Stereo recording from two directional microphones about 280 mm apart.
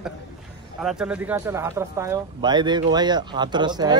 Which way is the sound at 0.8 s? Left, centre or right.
Centre.